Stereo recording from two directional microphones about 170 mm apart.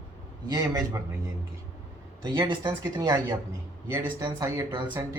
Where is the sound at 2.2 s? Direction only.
25° right (ahead or behind).